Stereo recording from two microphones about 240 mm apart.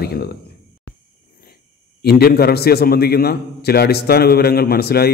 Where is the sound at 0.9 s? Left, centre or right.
Left.